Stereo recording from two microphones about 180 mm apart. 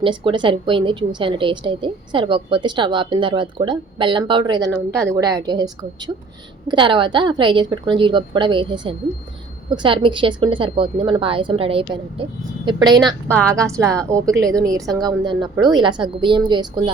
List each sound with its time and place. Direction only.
0.0 s a woman's voice: 25° right (ahead or behind)
4.7 s a woman's voice: 5° left (ahead or behind)
5.2 s a woman's voice: 25° right (ahead or behind)